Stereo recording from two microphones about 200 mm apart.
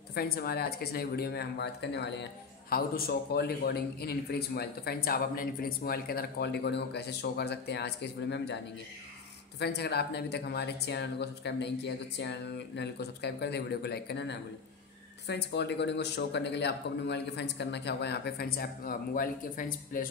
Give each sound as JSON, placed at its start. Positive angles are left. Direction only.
{"t": 0.1, "sound": "a man's voice", "side_deg": 50}
{"t": 9.6, "sound": "speech", "side_deg": 55}